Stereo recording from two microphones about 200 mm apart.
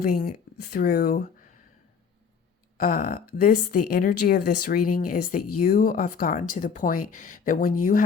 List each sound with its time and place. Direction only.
0.0 s a woman's voice: 50° left (ahead or behind)
2.7 s a woman's voice: 45° left (ahead or behind)